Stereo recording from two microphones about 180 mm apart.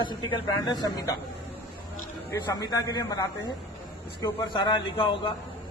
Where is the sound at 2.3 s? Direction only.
20° left (ahead or behind).